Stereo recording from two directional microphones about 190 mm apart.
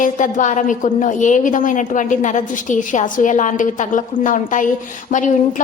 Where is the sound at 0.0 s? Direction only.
40° left (ahead or behind).